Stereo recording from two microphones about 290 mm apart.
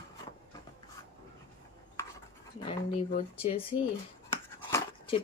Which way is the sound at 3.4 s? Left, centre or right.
Centre.